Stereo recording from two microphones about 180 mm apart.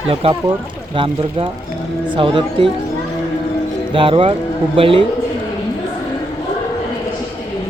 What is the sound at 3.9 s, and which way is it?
Speech, 30° right (ahead or behind).